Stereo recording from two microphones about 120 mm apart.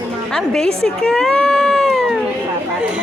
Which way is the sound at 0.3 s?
5° left (ahead or behind).